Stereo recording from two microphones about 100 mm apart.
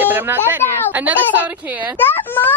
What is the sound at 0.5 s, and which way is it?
A woman's voice, 15° right (ahead or behind).